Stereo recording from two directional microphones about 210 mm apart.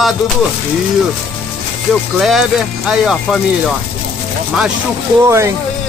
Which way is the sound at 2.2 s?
Centre (ahead or behind).